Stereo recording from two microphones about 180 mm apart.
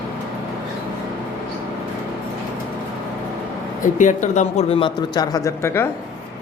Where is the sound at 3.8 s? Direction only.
45° left (ahead or behind); by 5.8 s 15° left (ahead or behind).